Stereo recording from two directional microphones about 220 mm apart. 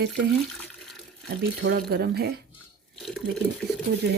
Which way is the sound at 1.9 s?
45° right (ahead or behind).